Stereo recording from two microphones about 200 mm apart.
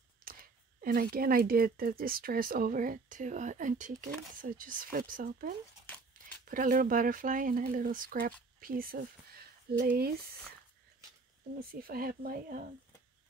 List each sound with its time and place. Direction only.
0.2 s speech: 45° right (ahead or behind)
11.7 s speech: 45° right (ahead or behind)